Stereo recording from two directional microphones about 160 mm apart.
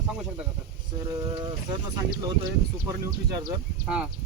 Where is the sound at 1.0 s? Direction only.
30° right (ahead or behind).